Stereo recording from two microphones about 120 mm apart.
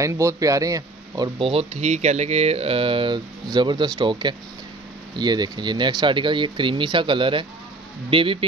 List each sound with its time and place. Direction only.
0.0 s speech: 25° right (ahead or behind)
1.4 s speech: 50° right (ahead or behind)